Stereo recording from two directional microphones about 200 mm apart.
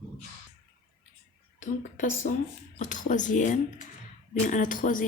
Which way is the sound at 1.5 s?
40° left (ahead or behind).